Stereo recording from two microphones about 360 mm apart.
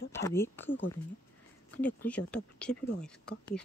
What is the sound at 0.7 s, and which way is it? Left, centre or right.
Speech, left.